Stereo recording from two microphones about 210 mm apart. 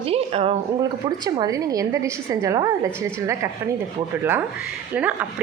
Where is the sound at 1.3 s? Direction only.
15° right (ahead or behind).